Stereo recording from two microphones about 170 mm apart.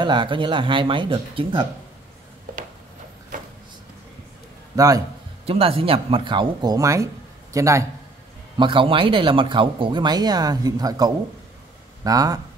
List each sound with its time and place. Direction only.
0.0 s speech: 25° right (ahead or behind)
4.7 s speech: 20° right (ahead or behind)
5.5 s a man's voice: 35° right (ahead or behind); by 7.8 s 20° right (ahead or behind)
8.5 s speech: 30° right (ahead or behind)